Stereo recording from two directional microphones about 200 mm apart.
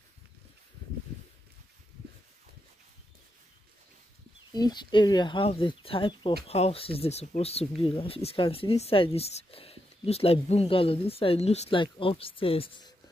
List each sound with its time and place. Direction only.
4.6 s speech: 20° left (ahead or behind)